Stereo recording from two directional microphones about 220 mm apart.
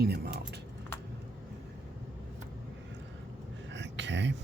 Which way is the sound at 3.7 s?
55° right (ahead or behind).